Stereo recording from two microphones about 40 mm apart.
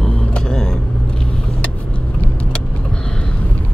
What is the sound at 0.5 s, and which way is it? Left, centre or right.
Vehicle, centre.